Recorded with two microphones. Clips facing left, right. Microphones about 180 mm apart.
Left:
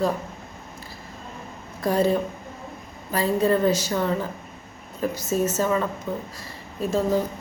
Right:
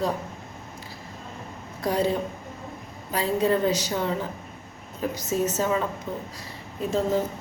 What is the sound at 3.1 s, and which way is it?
Speech, 15° right (ahead or behind).